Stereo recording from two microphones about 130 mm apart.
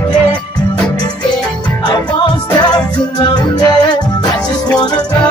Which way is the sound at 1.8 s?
35° left (ahead or behind).